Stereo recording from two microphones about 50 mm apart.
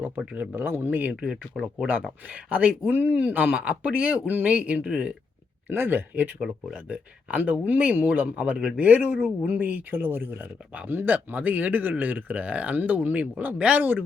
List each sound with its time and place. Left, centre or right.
0.3 s speech: right
1.3 s speech: centre
2.2 s speech: right
5.6 s speech: right
6.8 s speech: right
9.1 s speech: centre
9.5 s speech: right
10.0 s speech: right